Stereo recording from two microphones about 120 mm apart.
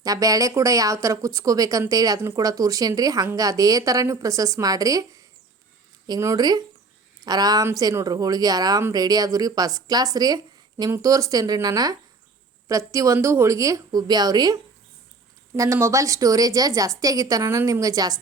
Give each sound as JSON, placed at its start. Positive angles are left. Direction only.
{"t": 0.0, "sound": "a woman's voice", "side_deg": -30}